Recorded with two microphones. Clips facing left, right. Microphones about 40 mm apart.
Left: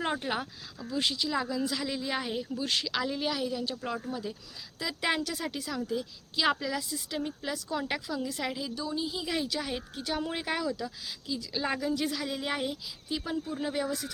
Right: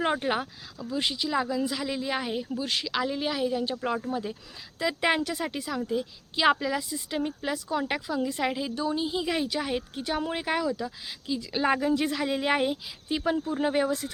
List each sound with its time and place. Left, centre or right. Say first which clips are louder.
0.0 s a woman's voice: right 5 dB; right
11.3 s a woman's voice: right 6 dB; right